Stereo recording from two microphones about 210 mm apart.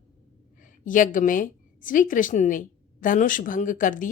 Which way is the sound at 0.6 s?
40° left (ahead or behind).